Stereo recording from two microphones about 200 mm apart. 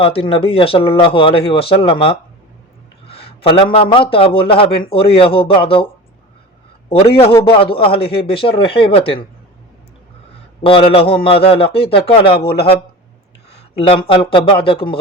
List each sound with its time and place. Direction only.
0.0 s a man's voice: 25° left (ahead or behind)
6.8 s a man's voice: 30° left (ahead or behind)
10.6 s a man's voice: 30° left (ahead or behind)
13.7 s a man's voice: 25° left (ahead or behind)